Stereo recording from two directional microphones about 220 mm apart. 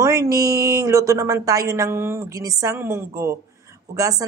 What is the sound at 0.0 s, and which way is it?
Speech, 15° right (ahead or behind).